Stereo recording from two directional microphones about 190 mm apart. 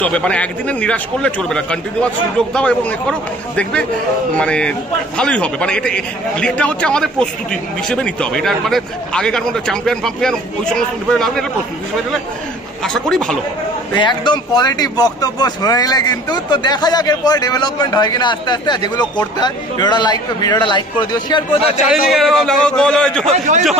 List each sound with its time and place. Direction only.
0.0 s speech: 5° left (ahead or behind)
12.8 s speech: 5° left (ahead or behind)
13.9 s speech: 25° left (ahead or behind)
21.9 s speech: centre (ahead or behind)